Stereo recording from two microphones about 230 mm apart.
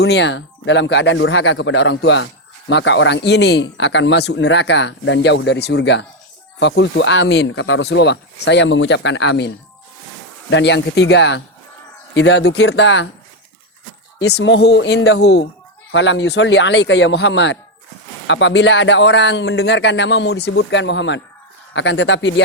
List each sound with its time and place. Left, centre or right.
0.0 s speech: left
10.5 s speech: left
14.2 s speech: left